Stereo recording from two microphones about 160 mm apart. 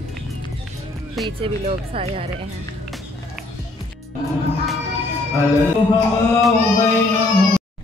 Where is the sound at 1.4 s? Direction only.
35° right (ahead or behind).